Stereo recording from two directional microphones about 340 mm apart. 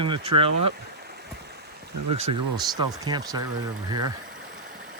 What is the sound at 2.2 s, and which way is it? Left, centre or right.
Speech, centre.